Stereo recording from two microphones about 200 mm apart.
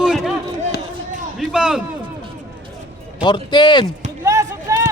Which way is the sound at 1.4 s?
5° right (ahead or behind).